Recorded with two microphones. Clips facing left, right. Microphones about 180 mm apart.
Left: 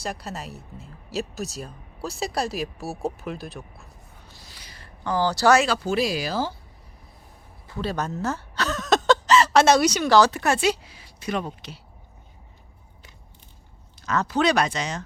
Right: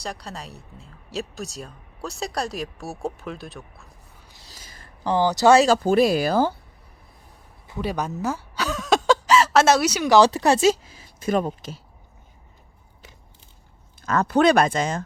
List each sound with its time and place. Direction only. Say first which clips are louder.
0.0 s speech: left 2 dB; 5° left (ahead or behind)
5.0 s speech: right 3 dB; 20° right (ahead or behind)
5.5 s speech: right 6 dB; 45° right (ahead or behind)
7.7 s speech: right 1 dB; 15° right (ahead or behind)
10.1 s speech: right 4 dB; 25° right (ahead or behind); by 11.8 s 45° right (ahead or behind)
14.0 s speech: right 4 dB; 55° right (ahead or behind)